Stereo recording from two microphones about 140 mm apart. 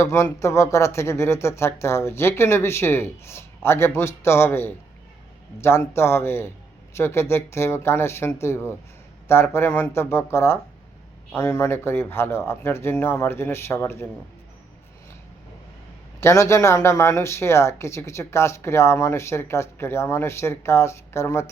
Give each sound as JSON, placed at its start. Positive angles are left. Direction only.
{"t": 0.0, "sound": "a man's voice", "side_deg": 20}
{"t": 16.2, "sound": "speech", "side_deg": 20}